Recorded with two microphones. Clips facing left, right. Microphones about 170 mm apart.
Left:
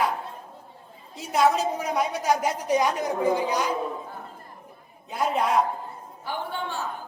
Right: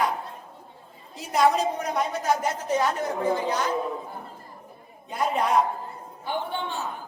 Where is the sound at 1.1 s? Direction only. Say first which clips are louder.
Even; centre (ahead or behind).